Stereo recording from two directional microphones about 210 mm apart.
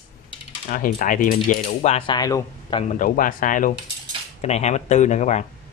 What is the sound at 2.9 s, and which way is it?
Speech, 40° left (ahead or behind).